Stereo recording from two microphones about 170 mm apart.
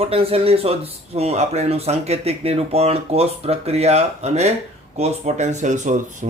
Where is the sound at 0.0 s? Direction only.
35° right (ahead or behind).